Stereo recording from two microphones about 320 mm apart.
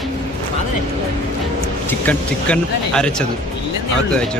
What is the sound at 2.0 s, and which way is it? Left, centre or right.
Speech, centre.